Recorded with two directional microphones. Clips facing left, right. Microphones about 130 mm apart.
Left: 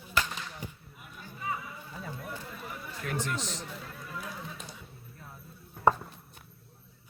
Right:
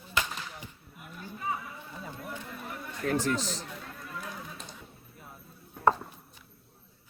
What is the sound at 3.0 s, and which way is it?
Speech, 35° right (ahead or behind).